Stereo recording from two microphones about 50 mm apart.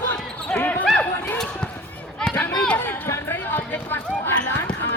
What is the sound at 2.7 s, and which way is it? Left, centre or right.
Speech, left.